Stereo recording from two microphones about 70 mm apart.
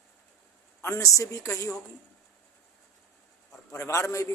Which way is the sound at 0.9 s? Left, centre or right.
Left.